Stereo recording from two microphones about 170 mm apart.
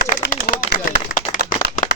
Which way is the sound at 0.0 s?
60° left (ahead or behind).